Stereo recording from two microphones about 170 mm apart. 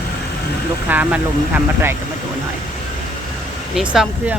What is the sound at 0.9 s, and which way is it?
Speech, 10° right (ahead or behind).